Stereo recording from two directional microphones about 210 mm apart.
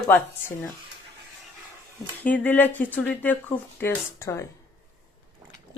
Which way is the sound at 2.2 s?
10° left (ahead or behind).